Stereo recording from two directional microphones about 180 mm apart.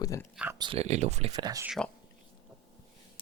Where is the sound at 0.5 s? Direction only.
25° right (ahead or behind).